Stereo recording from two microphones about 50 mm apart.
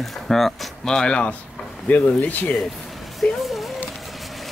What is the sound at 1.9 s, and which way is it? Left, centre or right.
Speech, left.